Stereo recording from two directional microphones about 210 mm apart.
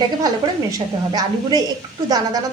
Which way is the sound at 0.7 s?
20° right (ahead or behind).